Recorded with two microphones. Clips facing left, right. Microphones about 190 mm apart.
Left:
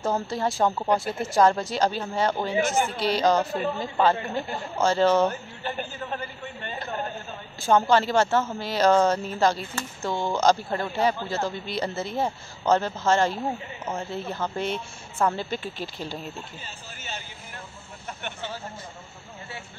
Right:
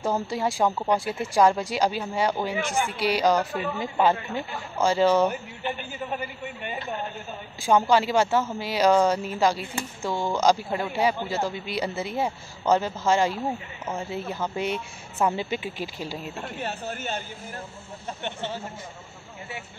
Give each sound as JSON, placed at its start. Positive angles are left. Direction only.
{"t": 0.0, "sound": "speech", "side_deg": -10}
{"t": 16.3, "sound": "speech", "side_deg": -65}
{"t": 18.0, "sound": "speech", "side_deg": -25}